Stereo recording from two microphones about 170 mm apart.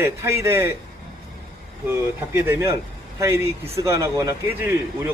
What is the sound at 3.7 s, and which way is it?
A man's voice, 15° right (ahead or behind).